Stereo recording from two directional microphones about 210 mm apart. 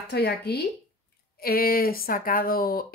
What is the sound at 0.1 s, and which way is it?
Speech, 50° left (ahead or behind).